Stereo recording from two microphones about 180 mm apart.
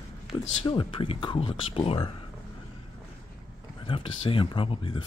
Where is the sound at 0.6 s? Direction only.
30° left (ahead or behind).